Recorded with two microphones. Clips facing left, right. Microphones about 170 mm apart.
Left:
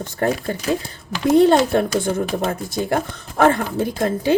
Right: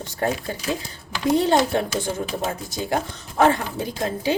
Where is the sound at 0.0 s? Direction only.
55° left (ahead or behind).